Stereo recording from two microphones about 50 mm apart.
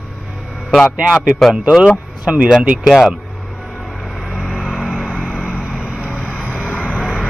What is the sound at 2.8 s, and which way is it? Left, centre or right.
Speech, centre.